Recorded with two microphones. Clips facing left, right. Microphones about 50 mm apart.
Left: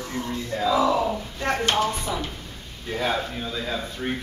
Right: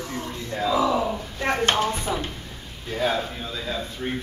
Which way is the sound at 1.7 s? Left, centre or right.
Right.